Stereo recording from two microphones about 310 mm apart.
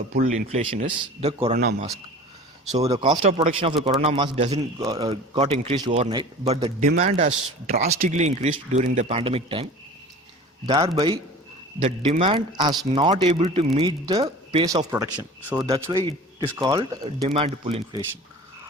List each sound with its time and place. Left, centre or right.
0.1 s a man's voice: right
10.7 s a man's voice: centre
15.6 s a man's voice: centre